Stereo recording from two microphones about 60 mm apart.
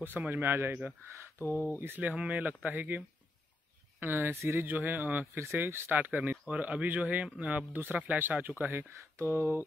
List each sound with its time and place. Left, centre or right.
0.0 s speech: right
1.4 s speech: left
2.0 s a man's voice: right
4.0 s speech: right
4.6 s a man's voice: right
5.5 s a man's voice: right
9.2 s speech: right